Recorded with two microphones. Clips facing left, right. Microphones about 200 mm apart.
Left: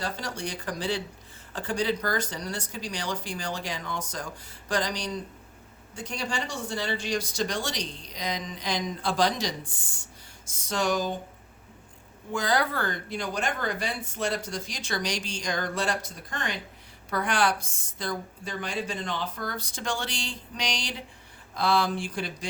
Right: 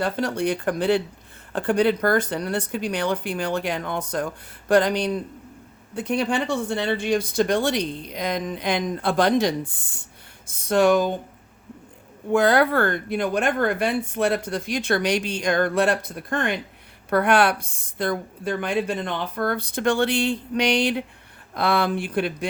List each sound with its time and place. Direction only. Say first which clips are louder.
0.0 s speech: right 10 dB; 60° right (ahead or behind)
12.3 s speech: right 9 dB; 60° right (ahead or behind)